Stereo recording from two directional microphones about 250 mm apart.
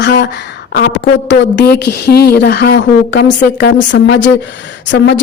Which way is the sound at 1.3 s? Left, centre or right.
Left.